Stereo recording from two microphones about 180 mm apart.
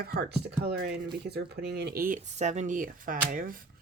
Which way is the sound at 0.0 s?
60° right (ahead or behind).